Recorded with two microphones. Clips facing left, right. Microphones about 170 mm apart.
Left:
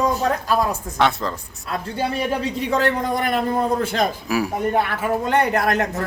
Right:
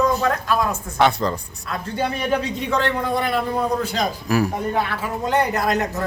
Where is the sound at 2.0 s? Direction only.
35° left (ahead or behind); by 4.1 s 50° left (ahead or behind).